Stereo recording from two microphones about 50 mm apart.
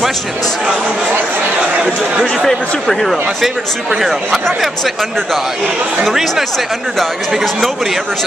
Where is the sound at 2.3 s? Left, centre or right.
Centre.